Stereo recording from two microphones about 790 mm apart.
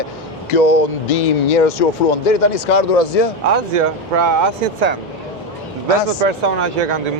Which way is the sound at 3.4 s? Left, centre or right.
Right.